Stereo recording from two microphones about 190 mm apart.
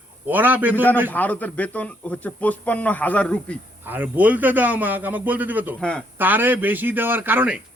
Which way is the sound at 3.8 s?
10° right (ahead or behind).